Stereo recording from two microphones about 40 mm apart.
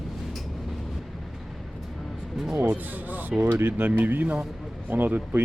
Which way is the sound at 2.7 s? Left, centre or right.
Right.